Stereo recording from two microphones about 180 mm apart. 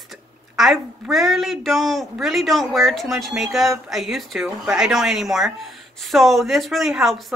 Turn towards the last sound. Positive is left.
turn(degrees=0)  # may be behind; listen again after turning